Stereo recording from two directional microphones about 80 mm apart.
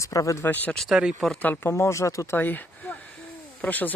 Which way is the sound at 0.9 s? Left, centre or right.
Centre.